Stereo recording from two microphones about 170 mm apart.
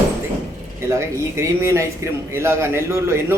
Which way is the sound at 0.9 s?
15° right (ahead or behind).